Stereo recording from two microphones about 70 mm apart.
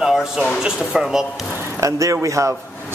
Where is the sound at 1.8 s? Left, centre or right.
Right.